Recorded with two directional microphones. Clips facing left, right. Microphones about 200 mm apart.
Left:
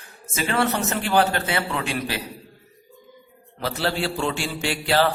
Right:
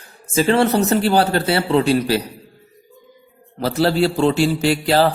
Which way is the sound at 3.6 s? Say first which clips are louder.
Right 9 dB; 40° right (ahead or behind).